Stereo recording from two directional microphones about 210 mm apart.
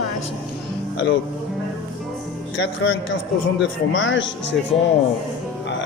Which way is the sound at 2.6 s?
65° left (ahead or behind).